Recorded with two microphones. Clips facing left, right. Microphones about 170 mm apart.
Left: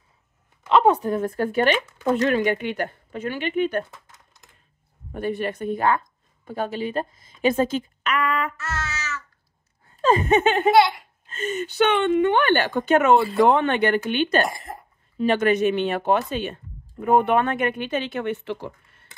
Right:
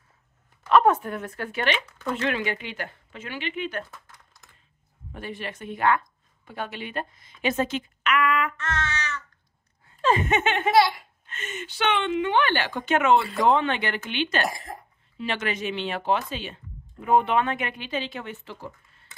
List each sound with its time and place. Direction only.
0.7 s speech: 25° left (ahead or behind); by 3.8 s 45° left (ahead or behind)
5.1 s a woman's voice: 45° left (ahead or behind)
8.5 s a sound: 5° left (ahead or behind)
9.8 s laughter: 40° left (ahead or behind)
11.2 s speech: 35° left (ahead or behind)
14.5 s speech: centre (ahead or behind)
15.1 s speech: 45° left (ahead or behind); by 18.7 s 65° left (ahead or behind)